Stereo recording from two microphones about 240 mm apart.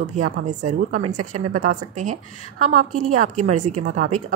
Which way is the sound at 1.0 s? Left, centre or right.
Right.